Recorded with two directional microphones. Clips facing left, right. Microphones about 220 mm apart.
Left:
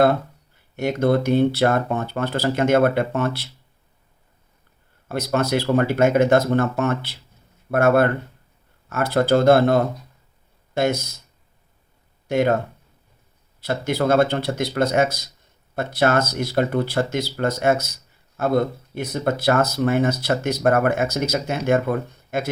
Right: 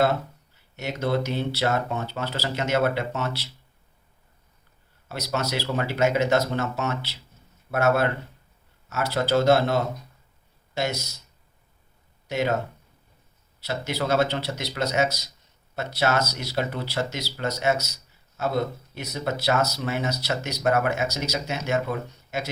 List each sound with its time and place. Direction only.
0.0 s speech: 55° left (ahead or behind)
5.0 s speech: 50° left (ahead or behind)
12.3 s speech: 55° left (ahead or behind)
13.6 s speech: 50° left (ahead or behind)